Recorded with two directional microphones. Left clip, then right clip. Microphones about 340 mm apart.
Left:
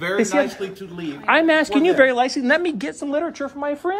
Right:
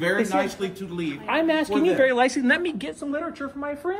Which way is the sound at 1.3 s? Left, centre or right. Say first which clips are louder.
Left 7 dB; centre.